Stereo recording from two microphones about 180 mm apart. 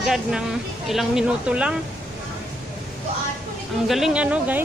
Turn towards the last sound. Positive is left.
turn(degrees=-10)  # may be behind; listen again after turning